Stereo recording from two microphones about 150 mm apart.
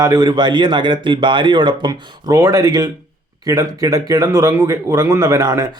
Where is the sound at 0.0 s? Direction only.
25° right (ahead or behind).